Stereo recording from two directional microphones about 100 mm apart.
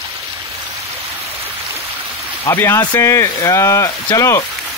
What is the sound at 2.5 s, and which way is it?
Speech, 20° left (ahead or behind).